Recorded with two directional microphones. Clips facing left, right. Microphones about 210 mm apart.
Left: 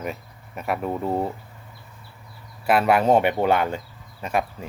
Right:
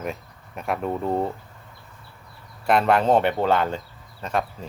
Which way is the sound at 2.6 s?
5° left (ahead or behind).